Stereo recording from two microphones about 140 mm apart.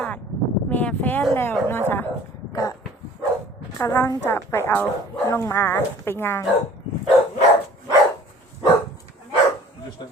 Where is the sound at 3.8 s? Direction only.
20° left (ahead or behind).